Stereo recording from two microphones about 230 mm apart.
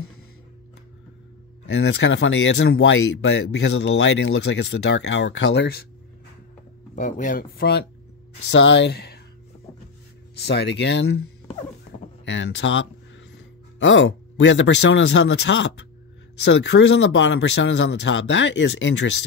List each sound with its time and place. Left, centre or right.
1.7 s speech: left
7.0 s speech: left
8.5 s speech: left
10.3 s speech: left
12.3 s speech: left